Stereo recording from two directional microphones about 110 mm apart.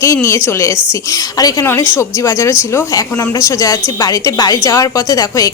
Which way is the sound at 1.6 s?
20° left (ahead or behind).